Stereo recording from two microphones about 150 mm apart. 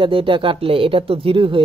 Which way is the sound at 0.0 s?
35° right (ahead or behind).